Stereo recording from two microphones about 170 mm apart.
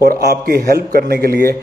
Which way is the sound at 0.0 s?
65° right (ahead or behind).